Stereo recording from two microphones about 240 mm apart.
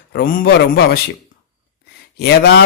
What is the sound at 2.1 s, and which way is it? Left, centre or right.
Speech, left.